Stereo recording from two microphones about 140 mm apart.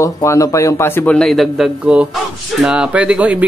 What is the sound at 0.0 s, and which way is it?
A man's voice, 20° left (ahead or behind).